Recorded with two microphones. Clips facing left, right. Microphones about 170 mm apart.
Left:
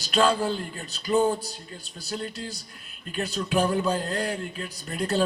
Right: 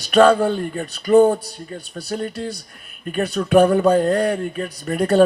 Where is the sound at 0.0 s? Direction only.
65° right (ahead or behind).